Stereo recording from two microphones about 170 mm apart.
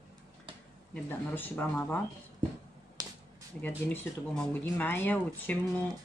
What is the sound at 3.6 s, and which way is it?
Speech, 10° left (ahead or behind).